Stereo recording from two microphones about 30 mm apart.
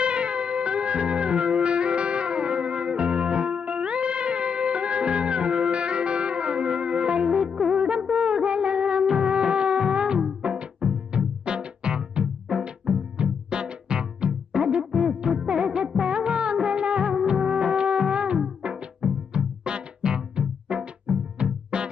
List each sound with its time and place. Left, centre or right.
0.0 s music: right
7.4 s music: right
7.7 s music: right
8.1 s music of bollywood: right
10.4 s music: right
16.0 s music of bollywood: right
18.1 s music: right